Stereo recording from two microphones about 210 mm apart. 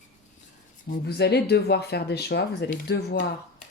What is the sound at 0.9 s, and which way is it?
Speech, 50° left (ahead or behind).